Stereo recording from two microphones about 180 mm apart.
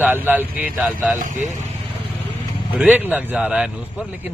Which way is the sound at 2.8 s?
10° right (ahead or behind).